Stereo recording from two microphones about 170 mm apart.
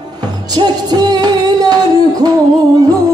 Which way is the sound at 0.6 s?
25° right (ahead or behind).